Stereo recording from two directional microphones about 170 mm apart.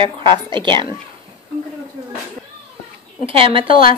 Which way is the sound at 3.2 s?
30° right (ahead or behind).